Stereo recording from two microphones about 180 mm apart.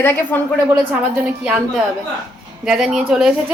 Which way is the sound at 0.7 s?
10° right (ahead or behind).